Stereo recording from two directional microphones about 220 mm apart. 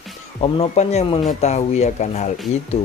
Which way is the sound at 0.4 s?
25° left (ahead or behind).